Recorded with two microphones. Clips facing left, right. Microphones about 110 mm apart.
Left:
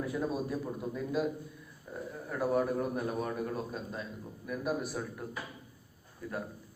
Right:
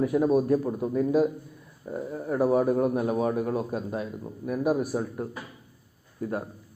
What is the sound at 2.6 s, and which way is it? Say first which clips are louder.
A man's voice: right 9 dB; 50° right (ahead or behind).